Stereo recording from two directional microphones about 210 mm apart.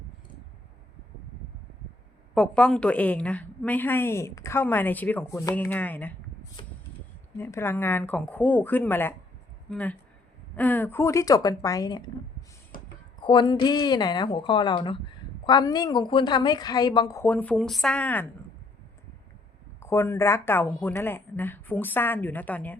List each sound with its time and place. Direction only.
2.3 s a woman's voice: 5° left (ahead or behind)
6.6 s vehicle: 25° left (ahead or behind)
7.3 s a woman's voice: 10° left (ahead or behind)
13.1 s a woman's voice: 20° left (ahead or behind)
17.3 s speech: 5° left (ahead or behind)
19.8 s a woman's voice: 15° left (ahead or behind)